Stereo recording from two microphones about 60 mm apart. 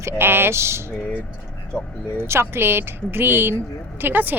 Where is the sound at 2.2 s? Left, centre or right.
Right.